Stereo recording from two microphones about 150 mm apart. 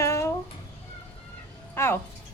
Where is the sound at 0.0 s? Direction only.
20° left (ahead or behind).